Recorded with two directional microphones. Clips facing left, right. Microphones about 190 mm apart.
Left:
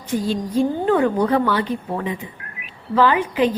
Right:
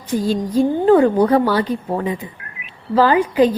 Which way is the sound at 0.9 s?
35° right (ahead or behind).